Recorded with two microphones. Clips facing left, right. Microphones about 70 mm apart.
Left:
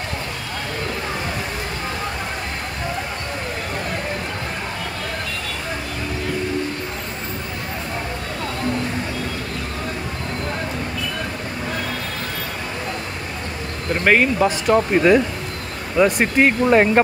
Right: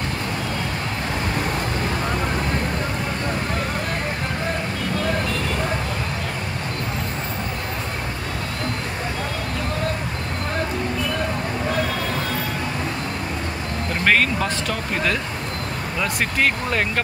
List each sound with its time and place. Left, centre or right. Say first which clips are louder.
14.0 s speech: left 4 dB; centre